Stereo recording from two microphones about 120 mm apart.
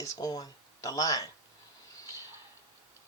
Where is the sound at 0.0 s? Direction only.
30° left (ahead or behind).